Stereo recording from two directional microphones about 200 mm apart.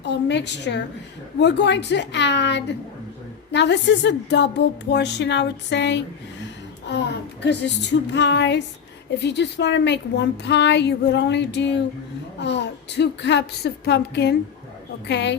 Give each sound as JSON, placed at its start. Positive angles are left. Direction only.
{"t": 0.0, "sound": "a woman's voice", "side_deg": 60}